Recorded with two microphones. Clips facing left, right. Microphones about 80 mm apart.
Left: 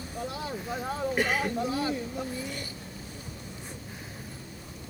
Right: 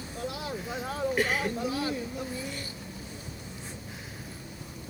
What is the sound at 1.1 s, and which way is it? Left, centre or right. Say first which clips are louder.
Speech: left 1 dB; left.